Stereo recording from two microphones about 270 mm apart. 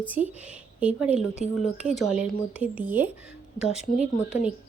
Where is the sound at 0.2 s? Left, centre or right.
Right.